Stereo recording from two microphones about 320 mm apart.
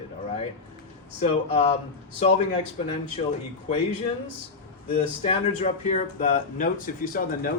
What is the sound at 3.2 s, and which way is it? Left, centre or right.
Speech, left.